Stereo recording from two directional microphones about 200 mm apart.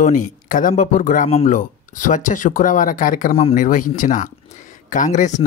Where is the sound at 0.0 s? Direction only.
40° left (ahead or behind).